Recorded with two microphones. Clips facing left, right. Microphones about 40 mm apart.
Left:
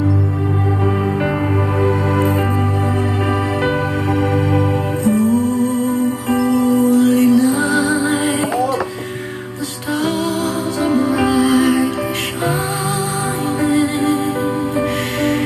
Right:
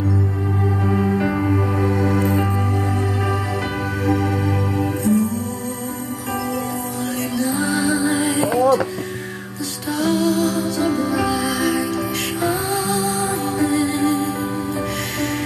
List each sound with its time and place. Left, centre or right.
1.8 s music: left
3.6 s music: left
9.9 s music: left
13.6 s music: left